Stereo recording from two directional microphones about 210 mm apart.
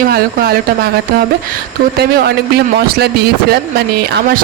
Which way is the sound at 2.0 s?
50° right (ahead or behind).